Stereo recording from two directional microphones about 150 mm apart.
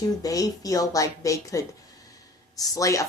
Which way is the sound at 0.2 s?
25° left (ahead or behind).